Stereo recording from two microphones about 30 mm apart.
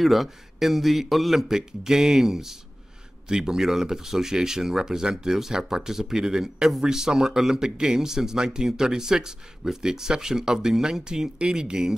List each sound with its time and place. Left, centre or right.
0.0 s a man's voice: centre
1.5 s speech: centre